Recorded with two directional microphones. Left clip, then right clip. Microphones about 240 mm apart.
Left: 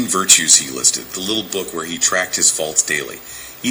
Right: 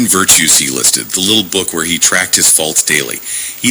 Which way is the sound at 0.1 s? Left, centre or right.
Right.